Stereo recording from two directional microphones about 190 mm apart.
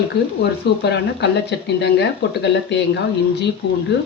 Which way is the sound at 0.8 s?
65° left (ahead or behind).